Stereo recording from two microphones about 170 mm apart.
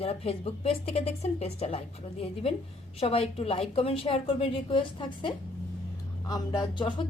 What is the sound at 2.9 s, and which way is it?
Speech, 35° left (ahead or behind).